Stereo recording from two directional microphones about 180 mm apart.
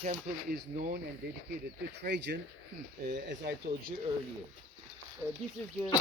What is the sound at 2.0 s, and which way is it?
Speech, 70° right (ahead or behind).